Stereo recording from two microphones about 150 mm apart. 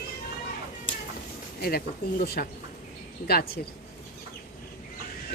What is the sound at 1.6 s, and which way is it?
Speech, 90° left.